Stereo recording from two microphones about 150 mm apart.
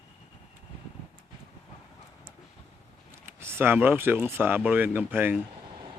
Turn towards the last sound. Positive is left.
turn(degrees=-15)  # may be behind; listen again after turning